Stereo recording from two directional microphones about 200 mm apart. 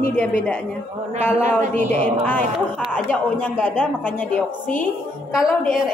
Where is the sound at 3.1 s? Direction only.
5° left (ahead or behind).